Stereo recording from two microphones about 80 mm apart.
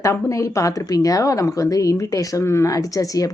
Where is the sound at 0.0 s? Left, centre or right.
Left.